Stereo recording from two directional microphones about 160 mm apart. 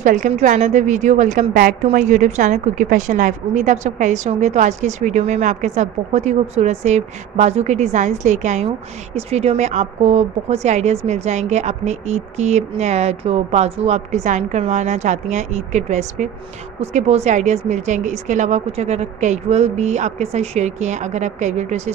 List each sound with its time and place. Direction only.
0.0 s a woman's voice: 50° right (ahead or behind)
1.5 s a woman's voice: 70° right (ahead or behind)
1.8 s a woman's voice: 50° right (ahead or behind)